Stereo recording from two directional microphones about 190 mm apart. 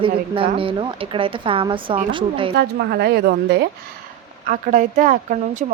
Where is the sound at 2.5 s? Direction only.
55° right (ahead or behind).